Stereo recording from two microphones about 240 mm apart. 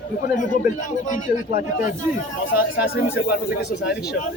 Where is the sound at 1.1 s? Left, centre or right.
Left.